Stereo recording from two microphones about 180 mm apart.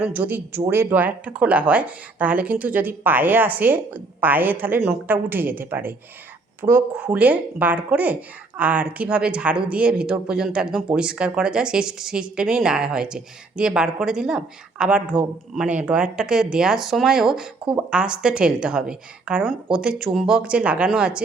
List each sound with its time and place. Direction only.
0.0 s speech: 10° right (ahead or behind)